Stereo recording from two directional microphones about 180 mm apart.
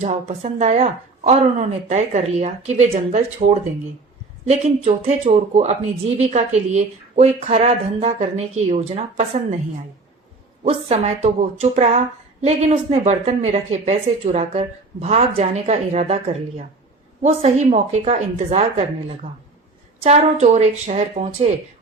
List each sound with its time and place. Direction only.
0.0 s a woman's voice: 40° right (ahead or behind)
10.6 s a woman's voice: 35° right (ahead or behind)